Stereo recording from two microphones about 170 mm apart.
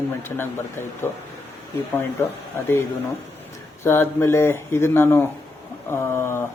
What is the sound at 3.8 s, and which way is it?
Speech, 15° left (ahead or behind).